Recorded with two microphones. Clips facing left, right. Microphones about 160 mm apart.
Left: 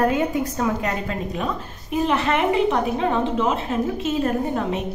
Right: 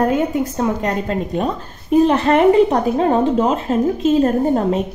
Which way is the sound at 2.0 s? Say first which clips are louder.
Right 6 dB; 35° right (ahead or behind).